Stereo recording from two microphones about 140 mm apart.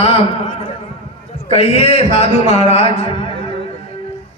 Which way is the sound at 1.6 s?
45° left (ahead or behind).